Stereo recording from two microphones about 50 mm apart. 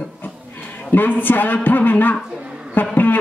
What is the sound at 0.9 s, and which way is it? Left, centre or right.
Speech, left.